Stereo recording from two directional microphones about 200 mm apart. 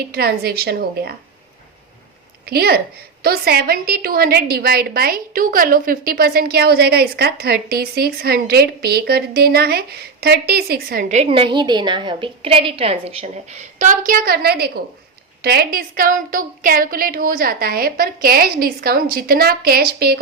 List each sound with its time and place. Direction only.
0.1 s a woman's voice: 50° right (ahead or behind)
2.5 s a woman's voice: 50° right (ahead or behind)